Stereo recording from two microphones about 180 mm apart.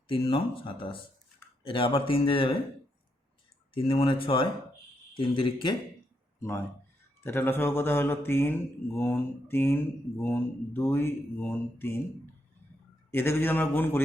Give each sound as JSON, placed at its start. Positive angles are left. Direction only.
{"t": 0.1, "sound": "speech", "side_deg": 30}
{"t": 3.8, "sound": "speech", "side_deg": 30}
{"t": 7.2, "sound": "speech", "side_deg": 15}